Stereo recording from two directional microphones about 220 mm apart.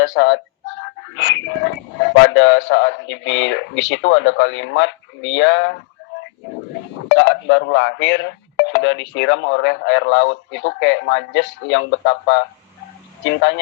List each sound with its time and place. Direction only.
0.0 s speech: 55° left (ahead or behind)
7.1 s speech: 55° left (ahead or behind)